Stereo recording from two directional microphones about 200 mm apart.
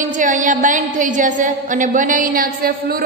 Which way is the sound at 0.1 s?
40° right (ahead or behind).